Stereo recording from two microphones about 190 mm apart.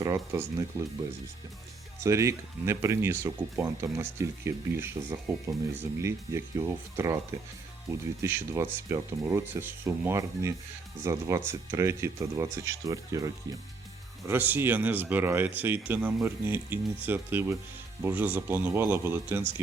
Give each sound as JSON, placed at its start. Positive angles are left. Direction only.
{"t": 0.0, "sound": "speech", "side_deg": -15}
{"t": 2.0, "sound": "speech", "side_deg": -15}